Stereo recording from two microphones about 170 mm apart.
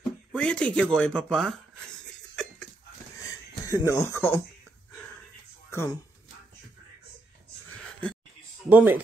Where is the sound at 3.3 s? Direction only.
20° left (ahead or behind).